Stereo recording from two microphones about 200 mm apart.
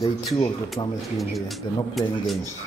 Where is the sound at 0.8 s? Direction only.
20° left (ahead or behind).